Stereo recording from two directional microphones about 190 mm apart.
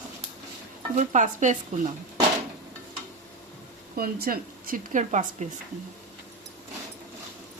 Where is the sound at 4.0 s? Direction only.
50° right (ahead or behind).